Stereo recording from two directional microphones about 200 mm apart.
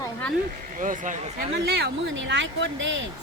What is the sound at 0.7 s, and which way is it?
Speech, 40° right (ahead or behind).